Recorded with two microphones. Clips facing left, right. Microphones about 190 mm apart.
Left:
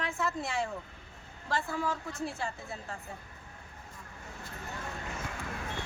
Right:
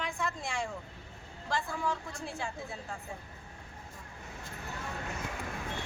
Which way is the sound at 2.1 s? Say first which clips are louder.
Left 3 dB; centre (ahead or behind).